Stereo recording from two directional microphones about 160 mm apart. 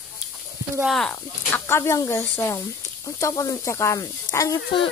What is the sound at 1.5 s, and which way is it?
Speech, 15° left (ahead or behind).